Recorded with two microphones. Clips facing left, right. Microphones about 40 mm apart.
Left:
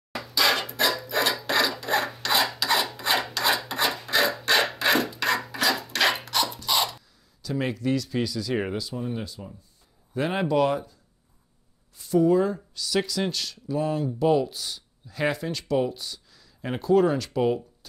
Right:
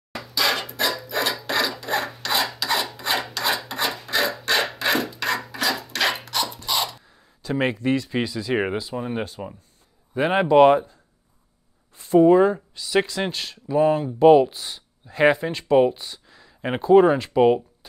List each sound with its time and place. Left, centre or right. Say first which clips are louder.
0.1 s filing: even; centre
7.1 s speech: right 4 dB; right
10.1 s speech: right 7 dB; right
12.0 s speech: right 6 dB; right